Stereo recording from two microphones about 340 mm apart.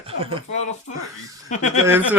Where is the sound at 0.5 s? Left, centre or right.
Centre.